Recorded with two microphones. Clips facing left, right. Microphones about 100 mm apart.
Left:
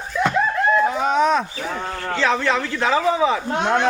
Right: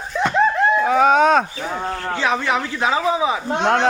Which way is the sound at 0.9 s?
70° right (ahead or behind).